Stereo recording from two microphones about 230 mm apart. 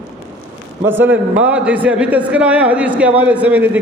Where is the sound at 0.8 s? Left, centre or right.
Centre.